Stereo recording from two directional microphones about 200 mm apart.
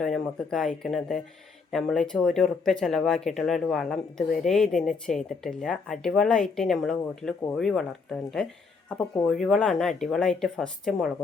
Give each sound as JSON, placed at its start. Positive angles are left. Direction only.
{"t": 0.0, "sound": "speech", "side_deg": 0}